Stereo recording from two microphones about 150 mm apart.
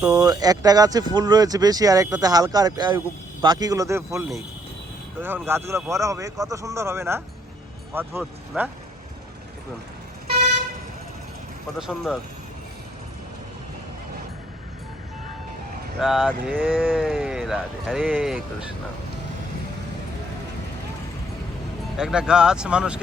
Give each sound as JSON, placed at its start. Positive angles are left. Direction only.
{"t": 0.1, "sound": "a man's voice", "side_deg": -25}
{"t": 11.8, "sound": "speech", "side_deg": 0}
{"t": 16.0, "sound": "speech", "side_deg": 0}
{"t": 21.9, "sound": "speech", "side_deg": -5}